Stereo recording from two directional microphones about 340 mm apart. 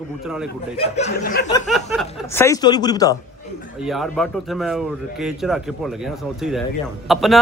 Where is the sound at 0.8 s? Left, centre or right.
Centre.